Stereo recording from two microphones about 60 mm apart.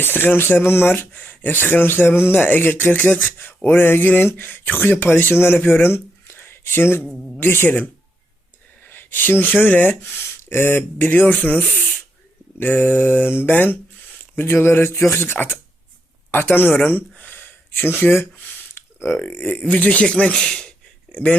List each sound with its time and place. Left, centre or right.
0.0 s speech: left
2.4 s speech: left
8.8 s speech: left
10.9 s speech: left
12.5 s speech: left
18.3 s a sound: left
19.2 s speech: left